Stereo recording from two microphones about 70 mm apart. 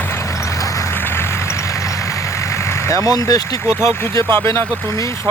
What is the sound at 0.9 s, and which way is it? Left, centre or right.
Vehicle, left.